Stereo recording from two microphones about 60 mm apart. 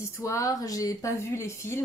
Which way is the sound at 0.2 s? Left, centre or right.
Left.